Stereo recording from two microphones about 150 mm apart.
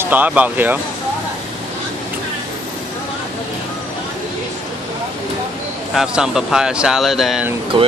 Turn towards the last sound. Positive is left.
turn(degrees=-35)  # may be behind; listen again after turning